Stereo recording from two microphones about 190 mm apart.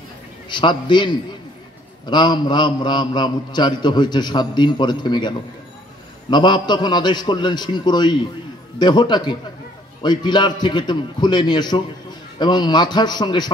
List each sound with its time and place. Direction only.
0.5 s a man's voice: 25° left (ahead or behind)
6.3 s a man's voice: 25° left (ahead or behind)